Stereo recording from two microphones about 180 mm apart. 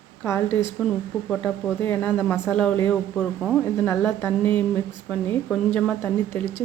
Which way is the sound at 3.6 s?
15° left (ahead or behind).